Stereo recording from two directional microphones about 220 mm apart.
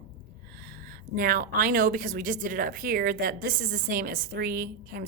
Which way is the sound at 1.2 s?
40° right (ahead or behind).